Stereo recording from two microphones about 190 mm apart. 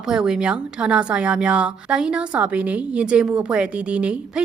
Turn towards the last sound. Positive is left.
turn(degrees=-5)  # may be behind; listen again after turning